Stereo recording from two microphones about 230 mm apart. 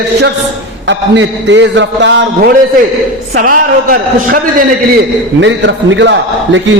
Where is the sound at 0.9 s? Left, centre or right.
Right.